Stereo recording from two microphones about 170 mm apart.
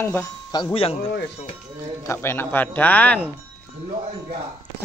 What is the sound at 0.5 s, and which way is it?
Speech, 25° left (ahead or behind).